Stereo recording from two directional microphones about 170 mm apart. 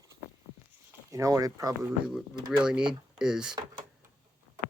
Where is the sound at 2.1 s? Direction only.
5° right (ahead or behind).